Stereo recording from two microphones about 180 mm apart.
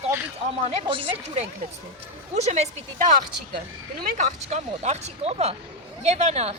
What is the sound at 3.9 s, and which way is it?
Speech, 55° right (ahead or behind).